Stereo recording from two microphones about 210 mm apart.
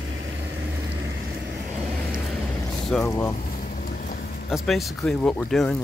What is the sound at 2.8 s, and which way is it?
Speech, 5° left (ahead or behind).